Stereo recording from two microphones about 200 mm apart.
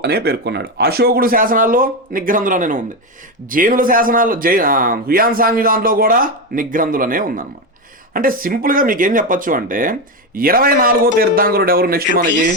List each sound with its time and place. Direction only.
0.0 s speech: 55° right (ahead or behind)